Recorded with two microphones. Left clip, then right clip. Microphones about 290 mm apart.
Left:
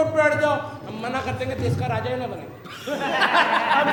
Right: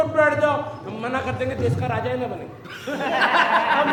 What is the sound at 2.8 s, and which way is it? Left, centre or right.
Speech, centre.